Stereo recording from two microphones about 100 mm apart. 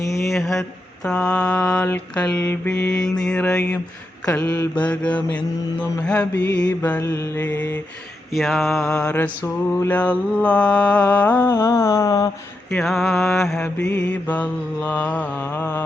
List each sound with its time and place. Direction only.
0.1 s a sound: centre (ahead or behind)
1.0 s mantra: 10° left (ahead or behind)
7.0 s mantra: 25° left (ahead or behind)
8.3 s mantra: centre (ahead or behind)
9.1 s mantra: 20° left (ahead or behind); by 12.3 s 35° left (ahead or behind)
12.7 s mantra: centre (ahead or behind); by 15.8 s 20° left (ahead or behind)